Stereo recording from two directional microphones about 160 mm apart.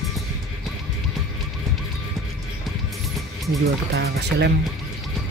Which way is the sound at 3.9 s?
85° right.